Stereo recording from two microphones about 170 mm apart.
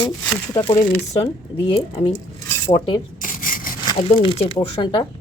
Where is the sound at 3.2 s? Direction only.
50° left (ahead or behind).